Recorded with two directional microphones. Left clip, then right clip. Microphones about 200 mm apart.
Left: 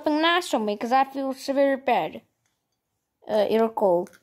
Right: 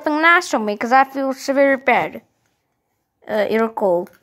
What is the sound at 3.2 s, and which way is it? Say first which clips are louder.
Speech: right 3 dB; 5° left (ahead or behind).